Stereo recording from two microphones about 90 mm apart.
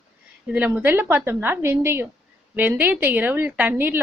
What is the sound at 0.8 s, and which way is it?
A woman's voice, 20° right (ahead or behind).